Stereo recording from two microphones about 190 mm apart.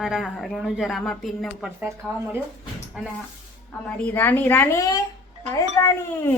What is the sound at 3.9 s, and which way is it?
A woman's voice, 10° left (ahead or behind).